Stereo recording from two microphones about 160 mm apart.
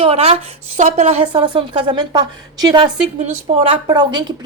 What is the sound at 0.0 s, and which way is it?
A woman's voice, 40° right (ahead or behind).